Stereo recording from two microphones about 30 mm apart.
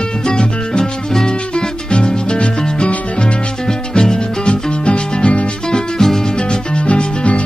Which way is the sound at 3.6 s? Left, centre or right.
Left.